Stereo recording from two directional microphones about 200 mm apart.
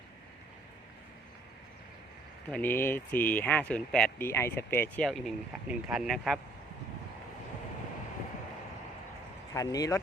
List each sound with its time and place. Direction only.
2.5 s speech: 10° left (ahead or behind)
9.5 s speech: 15° left (ahead or behind)